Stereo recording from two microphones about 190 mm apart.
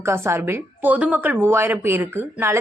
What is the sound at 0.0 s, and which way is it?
Speech, 15° right (ahead or behind).